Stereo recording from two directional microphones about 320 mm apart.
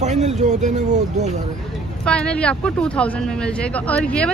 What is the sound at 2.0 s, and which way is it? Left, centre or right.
Speech, centre.